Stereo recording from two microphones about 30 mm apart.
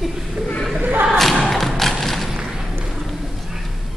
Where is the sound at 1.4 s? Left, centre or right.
Centre.